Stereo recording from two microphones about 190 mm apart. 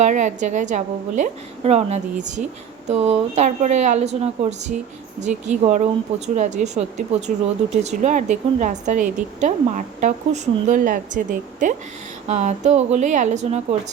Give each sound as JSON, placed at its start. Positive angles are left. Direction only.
{"t": 0.0, "sound": "a woman's voice", "side_deg": -40}